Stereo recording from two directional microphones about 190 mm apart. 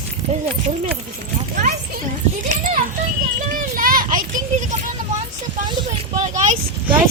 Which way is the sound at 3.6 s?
50° right (ahead or behind).